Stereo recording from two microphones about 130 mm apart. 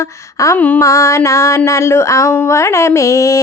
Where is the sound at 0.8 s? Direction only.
25° left (ahead or behind).